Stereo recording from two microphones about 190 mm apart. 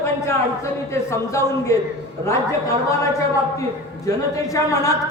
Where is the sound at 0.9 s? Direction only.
15° left (ahead or behind).